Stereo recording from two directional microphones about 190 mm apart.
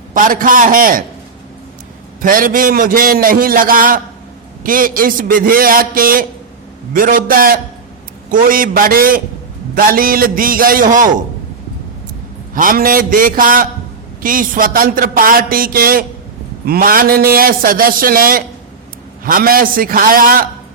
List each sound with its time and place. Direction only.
0.1 s speech: 45° right (ahead or behind)
2.2 s speech: 45° right (ahead or behind)
12.5 s speech: 45° right (ahead or behind)